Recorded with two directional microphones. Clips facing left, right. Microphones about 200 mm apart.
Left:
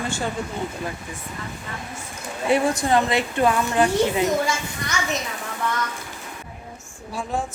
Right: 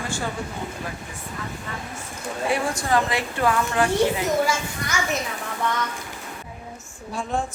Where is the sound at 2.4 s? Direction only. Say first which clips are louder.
Left 4 dB; 20° left (ahead or behind).